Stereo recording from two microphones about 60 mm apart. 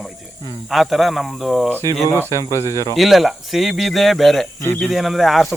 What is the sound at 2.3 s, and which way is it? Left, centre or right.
Speech, left.